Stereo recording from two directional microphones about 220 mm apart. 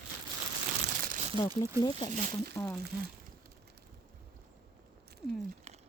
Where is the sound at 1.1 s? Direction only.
30° right (ahead or behind).